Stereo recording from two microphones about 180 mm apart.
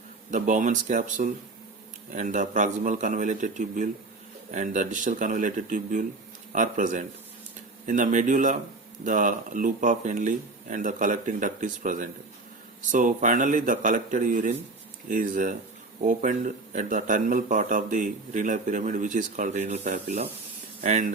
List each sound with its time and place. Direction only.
0.3 s a man's voice: 45° right (ahead or behind)